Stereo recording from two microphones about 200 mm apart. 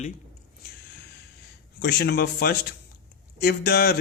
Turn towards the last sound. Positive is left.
turn(degrees=50)  # may be behind; listen again after turning